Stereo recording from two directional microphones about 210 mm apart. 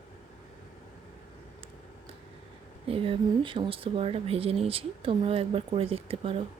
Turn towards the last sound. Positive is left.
turn(degrees=-25)  # may be behind; listen again after turning